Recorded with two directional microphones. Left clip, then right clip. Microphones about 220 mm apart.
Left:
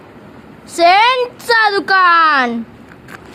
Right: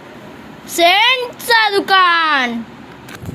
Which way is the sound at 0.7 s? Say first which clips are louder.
Left 2 dB; 15° left (ahead or behind).